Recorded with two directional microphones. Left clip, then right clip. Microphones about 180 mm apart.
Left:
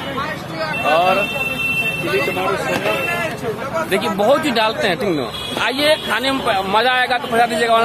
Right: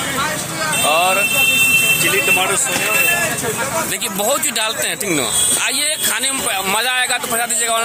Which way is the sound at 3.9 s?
15° right (ahead or behind).